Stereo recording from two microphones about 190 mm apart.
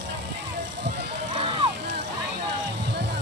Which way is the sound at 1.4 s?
30° right (ahead or behind).